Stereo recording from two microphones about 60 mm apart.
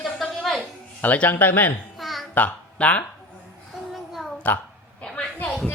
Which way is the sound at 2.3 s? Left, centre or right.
Left.